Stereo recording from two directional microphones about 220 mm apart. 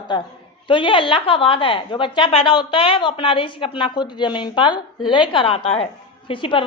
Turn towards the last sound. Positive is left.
turn(degrees=25)  # may be behind; listen again after turning